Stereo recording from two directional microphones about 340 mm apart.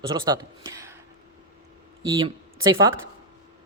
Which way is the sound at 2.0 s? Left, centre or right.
Centre.